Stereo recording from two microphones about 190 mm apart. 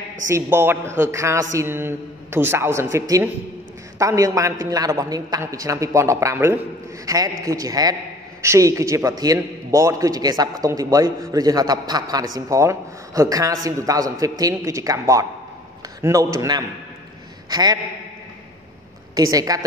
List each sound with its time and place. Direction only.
0.3 s a man's voice: 10° right (ahead or behind)
19.1 s a man's voice: 20° right (ahead or behind)